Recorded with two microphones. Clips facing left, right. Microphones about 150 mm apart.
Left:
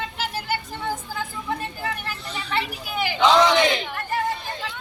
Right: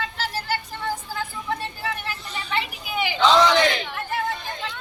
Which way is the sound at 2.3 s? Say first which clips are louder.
Left 1 dB; centre (ahead or behind).